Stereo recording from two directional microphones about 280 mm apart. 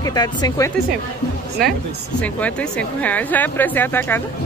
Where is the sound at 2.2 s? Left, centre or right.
Centre.